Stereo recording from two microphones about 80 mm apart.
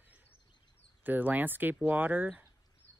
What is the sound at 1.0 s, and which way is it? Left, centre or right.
Speech, right.